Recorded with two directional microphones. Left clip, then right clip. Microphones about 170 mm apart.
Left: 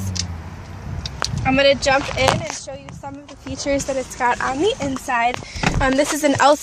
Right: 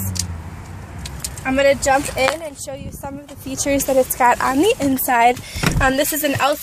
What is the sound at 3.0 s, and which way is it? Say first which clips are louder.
Speech: right 2 dB; 50° right (ahead or behind).